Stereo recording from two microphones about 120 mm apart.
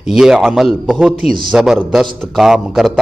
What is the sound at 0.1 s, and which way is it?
A man's voice, 5° right (ahead or behind).